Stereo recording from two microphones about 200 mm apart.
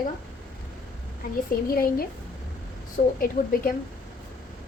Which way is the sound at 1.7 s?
50° left (ahead or behind).